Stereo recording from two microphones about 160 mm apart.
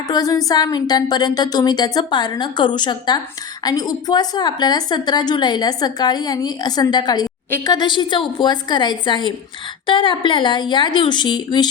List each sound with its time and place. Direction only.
0.1 s a woman's voice: 20° left (ahead or behind)